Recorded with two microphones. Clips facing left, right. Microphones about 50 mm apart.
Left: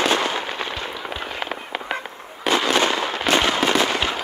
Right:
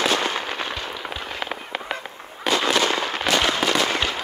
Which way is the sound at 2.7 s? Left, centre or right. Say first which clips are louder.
Left 1 dB; left.